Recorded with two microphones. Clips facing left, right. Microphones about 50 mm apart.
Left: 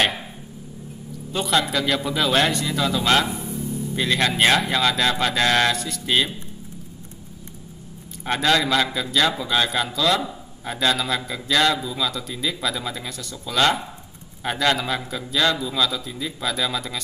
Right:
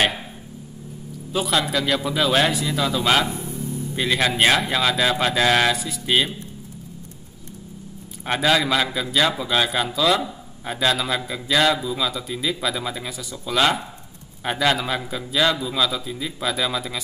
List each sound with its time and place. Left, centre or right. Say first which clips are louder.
1.3 s speech: even; centre
8.3 s a man's voice: even; centre